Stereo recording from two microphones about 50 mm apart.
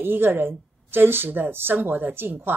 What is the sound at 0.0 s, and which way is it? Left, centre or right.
A woman's voice, right.